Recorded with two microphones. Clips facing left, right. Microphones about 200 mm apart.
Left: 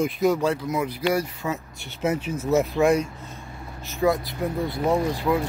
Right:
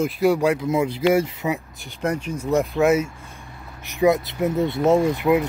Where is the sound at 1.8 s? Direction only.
5° left (ahead or behind).